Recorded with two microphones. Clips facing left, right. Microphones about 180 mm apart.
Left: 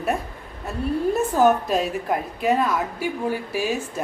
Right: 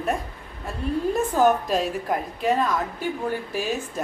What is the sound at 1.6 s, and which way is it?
A woman's voice, centre (ahead or behind).